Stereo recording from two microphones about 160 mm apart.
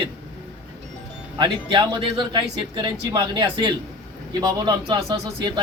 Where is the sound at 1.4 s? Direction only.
30° right (ahead or behind).